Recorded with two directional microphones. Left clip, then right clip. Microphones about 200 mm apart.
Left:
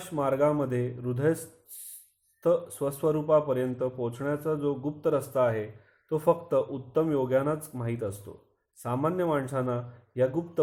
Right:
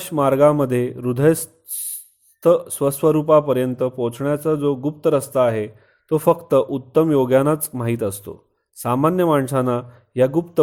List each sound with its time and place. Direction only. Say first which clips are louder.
0.0 s a man's voice: right 11 dB; 40° right (ahead or behind)
2.4 s a man's voice: right 10 dB; 40° right (ahead or behind)